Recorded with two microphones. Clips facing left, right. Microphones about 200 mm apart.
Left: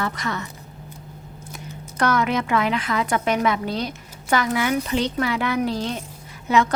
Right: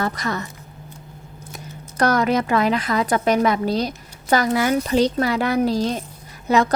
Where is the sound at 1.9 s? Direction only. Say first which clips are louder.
Right 3 dB; 40° right (ahead or behind).